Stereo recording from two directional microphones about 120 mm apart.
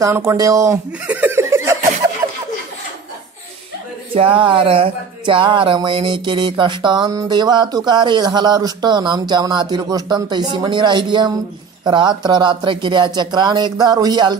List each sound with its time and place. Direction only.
0.0 s speech: 20° right (ahead or behind)
1.0 s laughter: 15° right (ahead or behind)
4.1 s speech: 45° right (ahead or behind)